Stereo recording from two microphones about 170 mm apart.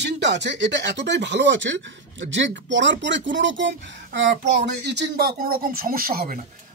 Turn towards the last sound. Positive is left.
turn(degrees=-60)  # may be behind; listen again after turning